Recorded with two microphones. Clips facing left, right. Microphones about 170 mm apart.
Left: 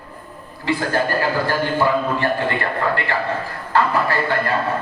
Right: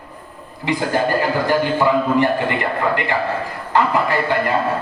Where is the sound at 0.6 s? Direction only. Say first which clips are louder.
Right 1 dB; 15° right (ahead or behind).